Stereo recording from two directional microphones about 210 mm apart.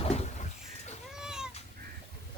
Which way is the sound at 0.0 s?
30° left (ahead or behind).